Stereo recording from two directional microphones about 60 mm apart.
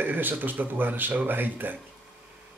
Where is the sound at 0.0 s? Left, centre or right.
Right.